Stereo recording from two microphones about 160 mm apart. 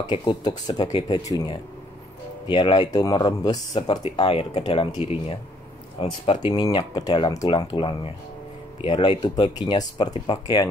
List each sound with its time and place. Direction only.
0.0 s speech: 25° left (ahead or behind)
4.9 s speech: 15° right (ahead or behind)
5.9 s speech: 30° left (ahead or behind)